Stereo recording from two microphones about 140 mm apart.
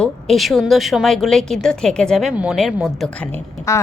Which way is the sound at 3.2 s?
15° left (ahead or behind).